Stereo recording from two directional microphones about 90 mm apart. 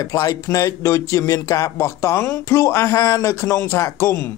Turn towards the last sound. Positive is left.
turn(degrees=30)  # may be behind; listen again after turning